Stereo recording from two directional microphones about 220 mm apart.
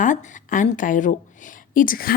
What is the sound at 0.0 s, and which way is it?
A woman's voice, 35° left (ahead or behind).